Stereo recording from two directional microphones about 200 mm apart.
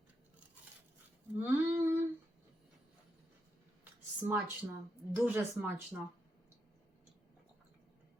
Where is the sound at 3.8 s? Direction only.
10° right (ahead or behind).